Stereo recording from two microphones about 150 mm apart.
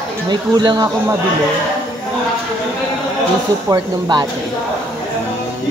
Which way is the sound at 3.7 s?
30° right (ahead or behind).